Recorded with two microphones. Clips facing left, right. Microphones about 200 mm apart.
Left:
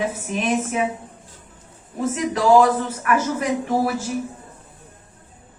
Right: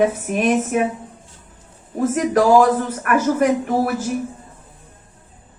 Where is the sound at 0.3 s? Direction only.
55° right (ahead or behind).